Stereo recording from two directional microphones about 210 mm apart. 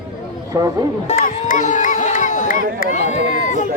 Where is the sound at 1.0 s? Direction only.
40° left (ahead or behind).